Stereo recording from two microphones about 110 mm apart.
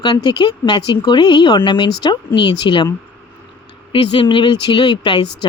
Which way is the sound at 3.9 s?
50° left (ahead or behind).